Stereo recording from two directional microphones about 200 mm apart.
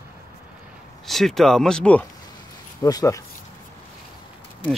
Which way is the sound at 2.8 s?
15° left (ahead or behind).